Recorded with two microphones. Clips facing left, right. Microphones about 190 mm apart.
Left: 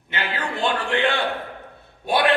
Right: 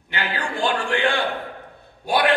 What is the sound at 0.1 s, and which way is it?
A man's voice, 20° left (ahead or behind).